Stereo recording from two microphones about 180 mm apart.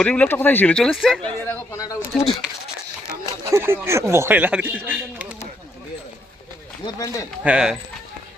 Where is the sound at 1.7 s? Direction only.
20° left (ahead or behind).